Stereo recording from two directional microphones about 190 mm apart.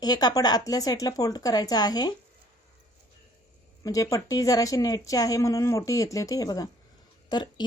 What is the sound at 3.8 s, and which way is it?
Speech, 15° left (ahead or behind).